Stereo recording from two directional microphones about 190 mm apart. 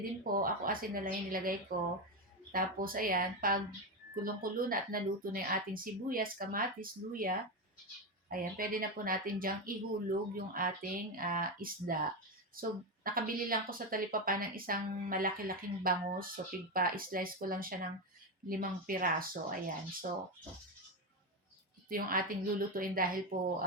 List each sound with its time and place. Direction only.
0.3 s speech: 50° right (ahead or behind)
21.8 s a woman's voice: 50° right (ahead or behind)